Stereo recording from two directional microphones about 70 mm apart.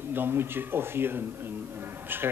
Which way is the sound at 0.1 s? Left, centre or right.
Right.